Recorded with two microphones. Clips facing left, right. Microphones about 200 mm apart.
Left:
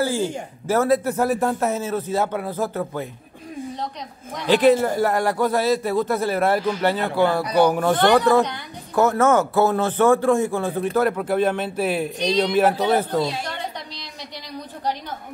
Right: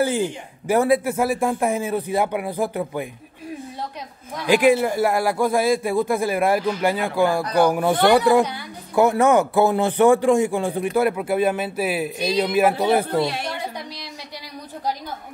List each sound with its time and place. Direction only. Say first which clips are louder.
0.0 s a man's voice: right 1 dB; 20° right (ahead or behind)
4.5 s speech: even; 10° right (ahead or behind)